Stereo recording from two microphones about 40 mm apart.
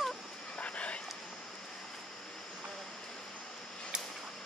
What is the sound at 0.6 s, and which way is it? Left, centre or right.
Dog, left.